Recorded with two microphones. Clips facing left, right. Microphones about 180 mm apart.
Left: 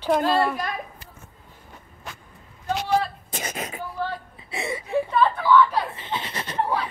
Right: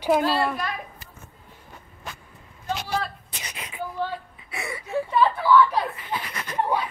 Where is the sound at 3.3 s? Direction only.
45° left (ahead or behind).